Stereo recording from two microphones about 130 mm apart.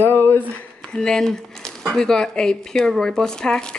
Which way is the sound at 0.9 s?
5° left (ahead or behind).